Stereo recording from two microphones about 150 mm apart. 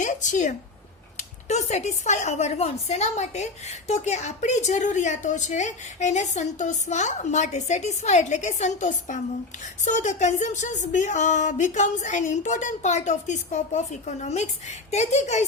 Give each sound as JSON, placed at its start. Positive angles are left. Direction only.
{"t": 0.0, "sound": "a woman's voice", "side_deg": 55}